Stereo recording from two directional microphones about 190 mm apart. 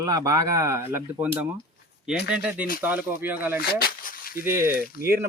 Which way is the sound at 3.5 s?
55° left (ahead or behind).